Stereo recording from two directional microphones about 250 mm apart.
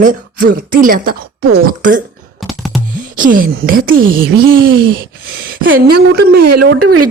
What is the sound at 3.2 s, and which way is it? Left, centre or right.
Speech, right.